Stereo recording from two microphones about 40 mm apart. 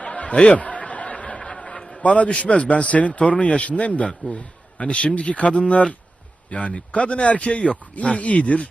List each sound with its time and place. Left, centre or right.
0.0 s snicker: left
1.4 s a sound: left
2.4 s speech: left